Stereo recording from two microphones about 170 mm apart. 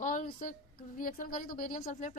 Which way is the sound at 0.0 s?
50° left (ahead or behind).